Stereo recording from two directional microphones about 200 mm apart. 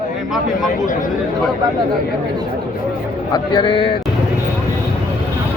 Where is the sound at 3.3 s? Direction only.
20° left (ahead or behind).